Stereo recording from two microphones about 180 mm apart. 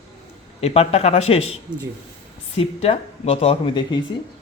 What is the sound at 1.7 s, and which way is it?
Speech, 5° right (ahead or behind).